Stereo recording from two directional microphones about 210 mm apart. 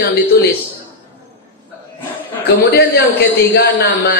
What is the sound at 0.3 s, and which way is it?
Speech, 50° left (ahead or behind).